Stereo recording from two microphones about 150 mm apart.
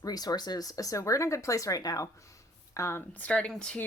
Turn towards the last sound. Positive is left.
turn(degrees=5)  # may be behind; listen again after turning